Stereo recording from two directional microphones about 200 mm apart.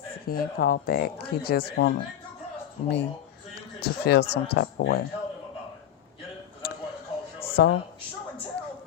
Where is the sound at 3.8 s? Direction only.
55° left (ahead or behind).